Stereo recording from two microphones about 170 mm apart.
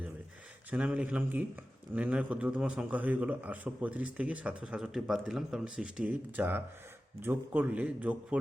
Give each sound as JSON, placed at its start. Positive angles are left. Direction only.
{"t": 0.7, "sound": "a man's voice", "side_deg": -5}